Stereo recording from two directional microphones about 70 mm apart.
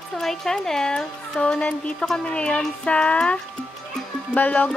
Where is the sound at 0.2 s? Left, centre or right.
Centre.